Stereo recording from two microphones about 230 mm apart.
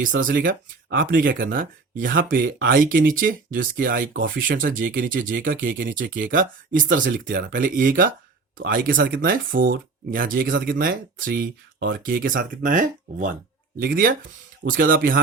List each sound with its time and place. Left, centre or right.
0.2 s speech: right